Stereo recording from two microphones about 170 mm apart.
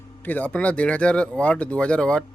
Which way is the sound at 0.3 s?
10° left (ahead or behind).